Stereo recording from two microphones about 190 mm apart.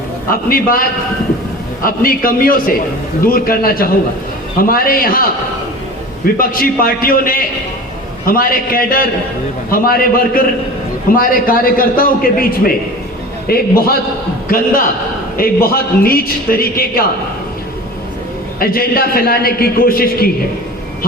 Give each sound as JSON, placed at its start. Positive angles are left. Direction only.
{"t": 0.3, "sound": "a man's voice", "side_deg": 50}
{"t": 6.4, "sound": "a man's voice", "side_deg": 50}
{"t": 15.4, "sound": "a man's voice", "side_deg": 50}
{"t": 18.6, "sound": "a man's voice", "side_deg": 50}